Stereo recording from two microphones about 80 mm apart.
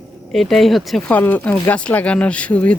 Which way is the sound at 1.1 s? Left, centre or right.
Centre.